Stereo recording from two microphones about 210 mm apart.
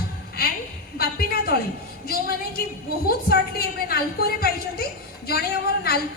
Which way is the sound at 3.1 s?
45° left (ahead or behind).